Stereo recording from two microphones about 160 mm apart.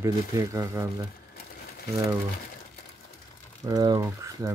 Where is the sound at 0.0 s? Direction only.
20° right (ahead or behind).